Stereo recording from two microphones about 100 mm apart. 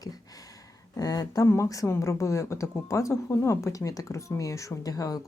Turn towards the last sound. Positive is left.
turn(degrees=35)  # may be behind; listen again after turning